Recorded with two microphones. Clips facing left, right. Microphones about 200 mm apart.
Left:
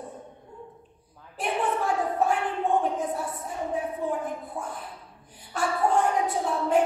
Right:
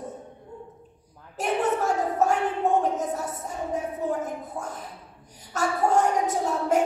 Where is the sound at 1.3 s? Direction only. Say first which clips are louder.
Right 3 dB; 45° right (ahead or behind).